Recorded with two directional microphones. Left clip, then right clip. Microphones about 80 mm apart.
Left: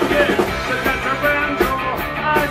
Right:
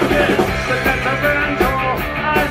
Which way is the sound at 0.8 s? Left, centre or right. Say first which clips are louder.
Right 1 dB; left.